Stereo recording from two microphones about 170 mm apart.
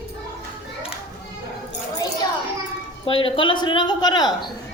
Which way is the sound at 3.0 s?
30° left (ahead or behind).